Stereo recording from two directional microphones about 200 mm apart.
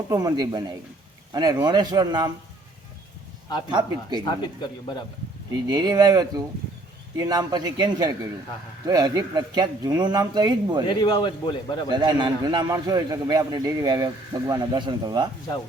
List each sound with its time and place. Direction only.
0.1 s a man's voice: 20° right (ahead or behind)
3.7 s a man's voice: 20° right (ahead or behind)
4.3 s a man's voice: 20° left (ahead or behind)
5.6 s a man's voice: 20° right (ahead or behind)
10.8 s a man's voice: 25° left (ahead or behind)
11.9 s a man's voice: 20° right (ahead or behind)